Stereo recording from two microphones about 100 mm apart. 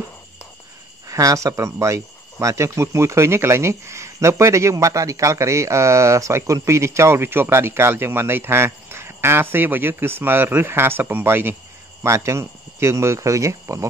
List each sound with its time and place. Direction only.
1.0 s speech: 35° right (ahead or behind)